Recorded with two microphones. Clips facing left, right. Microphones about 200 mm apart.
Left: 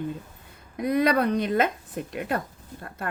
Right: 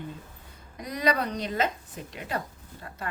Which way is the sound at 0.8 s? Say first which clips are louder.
Left 6 dB; 55° left (ahead or behind).